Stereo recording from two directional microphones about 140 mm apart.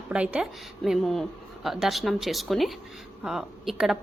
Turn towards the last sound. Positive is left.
turn(degrees=0)  # may be behind; listen again after turning